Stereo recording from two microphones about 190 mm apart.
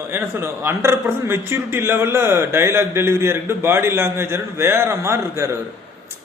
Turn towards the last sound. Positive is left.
turn(degrees=-15)  # may be behind; listen again after turning